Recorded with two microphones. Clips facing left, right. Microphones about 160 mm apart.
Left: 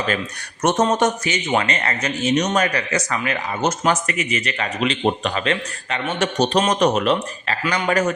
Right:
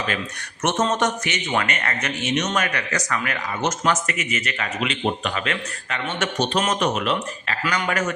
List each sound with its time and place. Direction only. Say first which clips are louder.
0.6 s a man's voice: left 4 dB; 35° left (ahead or behind)